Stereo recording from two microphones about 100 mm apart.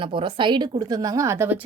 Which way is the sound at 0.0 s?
55° right (ahead or behind).